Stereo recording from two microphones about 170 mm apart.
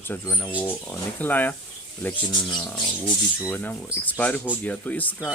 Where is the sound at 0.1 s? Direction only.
10° left (ahead or behind).